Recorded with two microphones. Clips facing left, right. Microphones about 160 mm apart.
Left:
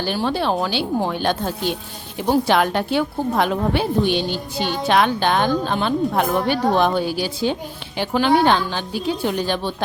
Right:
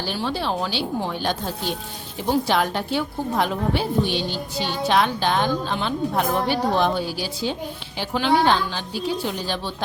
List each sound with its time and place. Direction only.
0.0 s a woman's voice: 55° left (ahead or behind)
2.5 s a woman's voice: 60° left (ahead or behind)